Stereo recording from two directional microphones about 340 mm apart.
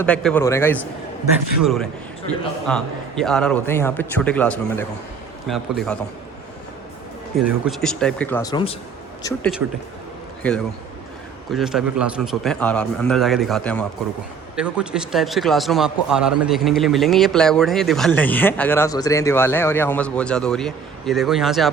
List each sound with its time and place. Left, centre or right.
0.0 s speech: centre
2.2 s speech: centre
7.3 s speech: centre
9.2 s speech: centre